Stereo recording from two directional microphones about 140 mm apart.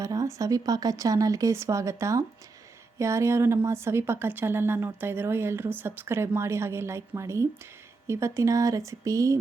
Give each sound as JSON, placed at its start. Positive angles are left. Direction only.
{"t": 0.0, "sound": "a woman's voice", "side_deg": -25}